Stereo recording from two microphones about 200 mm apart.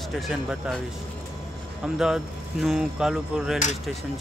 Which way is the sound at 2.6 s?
5° right (ahead or behind).